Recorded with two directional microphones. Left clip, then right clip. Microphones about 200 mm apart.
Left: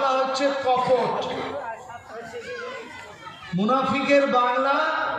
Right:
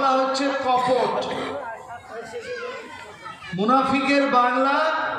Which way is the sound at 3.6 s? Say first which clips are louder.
Right 3 dB; 35° right (ahead or behind).